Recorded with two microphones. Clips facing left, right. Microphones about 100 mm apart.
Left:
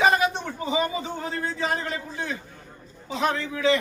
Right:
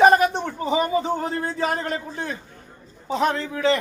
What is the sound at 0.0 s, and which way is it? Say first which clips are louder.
A man's voice: right 6 dB; 50° right (ahead or behind).